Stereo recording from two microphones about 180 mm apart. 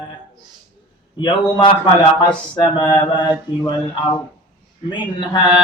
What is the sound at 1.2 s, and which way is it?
A man's voice, 25° left (ahead or behind).